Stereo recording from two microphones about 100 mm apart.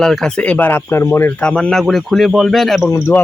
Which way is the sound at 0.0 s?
5° left (ahead or behind).